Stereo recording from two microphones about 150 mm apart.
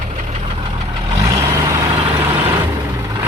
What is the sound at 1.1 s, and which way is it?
Vehicle, 20° right (ahead or behind).